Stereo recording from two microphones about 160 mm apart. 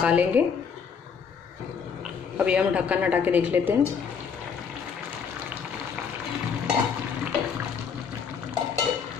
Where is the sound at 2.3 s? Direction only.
5° right (ahead or behind).